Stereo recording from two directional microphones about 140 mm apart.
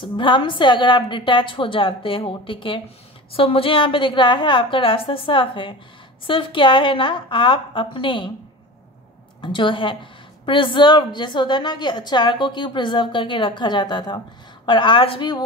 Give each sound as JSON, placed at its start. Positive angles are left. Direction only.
{"t": 0.0, "sound": "a woman's voice", "side_deg": 35}
{"t": 9.4, "sound": "a woman's voice", "side_deg": 35}